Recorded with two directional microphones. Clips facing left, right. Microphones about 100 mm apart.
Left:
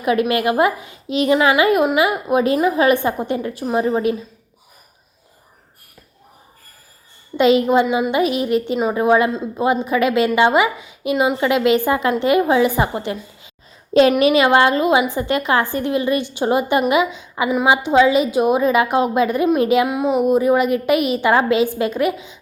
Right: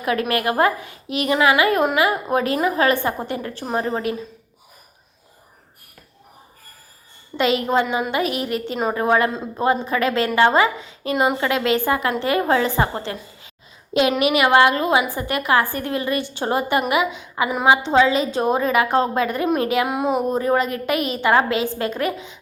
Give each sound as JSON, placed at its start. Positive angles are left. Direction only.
{"t": 0.0, "sound": "a woman's voice", "side_deg": 20}
{"t": 7.3, "sound": "a woman's voice", "side_deg": 20}
{"t": 14.2, "sound": "a woman's voice", "side_deg": 30}